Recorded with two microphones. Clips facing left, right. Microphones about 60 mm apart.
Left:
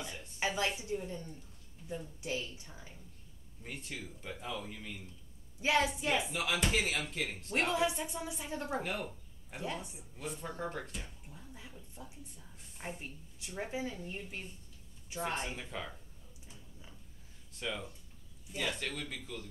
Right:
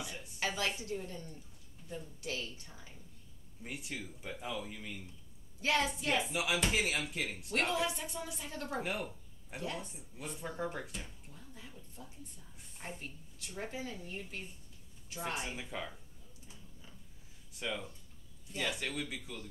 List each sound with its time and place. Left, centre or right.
0.0 s a sound: centre
0.7 s a woman's voice: centre
3.6 s speech: centre
5.6 s a woman's voice: centre
6.3 s speech: centre
7.5 s a woman's voice: centre
8.8 s speech: centre
9.8 s a woman's voice: centre
10.1 s speech: centre
11.2 s a woman's voice: centre
15.1 s speech: centre
17.5 s speech: centre